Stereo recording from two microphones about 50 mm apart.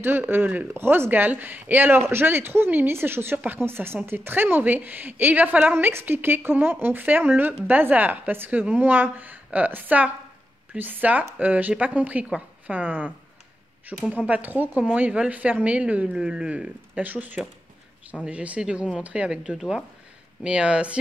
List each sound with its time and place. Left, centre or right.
0.0 s speech: right
3.3 s a woman's voice: right
5.8 s speech: right
8.5 s a woman's voice: right
14.1 s a woman's voice: right
17.0 s a woman's voice: right
19.4 s a woman's voice: centre